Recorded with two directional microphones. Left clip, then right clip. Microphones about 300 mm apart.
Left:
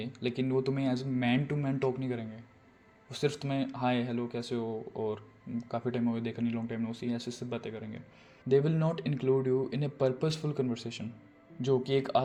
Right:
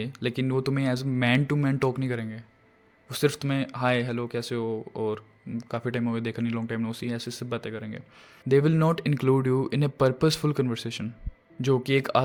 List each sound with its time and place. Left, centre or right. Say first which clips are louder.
0.0 s speech: right 4 dB; right